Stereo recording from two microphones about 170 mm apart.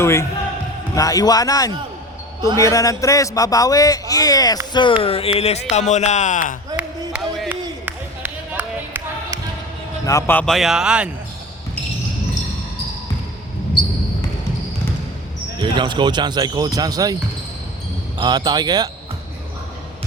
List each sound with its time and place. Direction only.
0.0 s a man's voice: 15° left (ahead or behind); by 6.6 s 50° left (ahead or behind)
6.7 s a sound: 10° right (ahead or behind)
10.1 s speech: 15° left (ahead or behind); by 11.1 s 5° right (ahead or behind)
15.6 s speech: 25° right (ahead or behind)
18.2 s speech: 25° right (ahead or behind)